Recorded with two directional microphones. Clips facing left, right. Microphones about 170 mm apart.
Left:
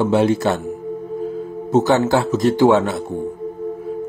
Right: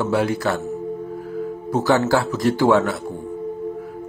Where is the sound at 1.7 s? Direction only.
20° left (ahead or behind).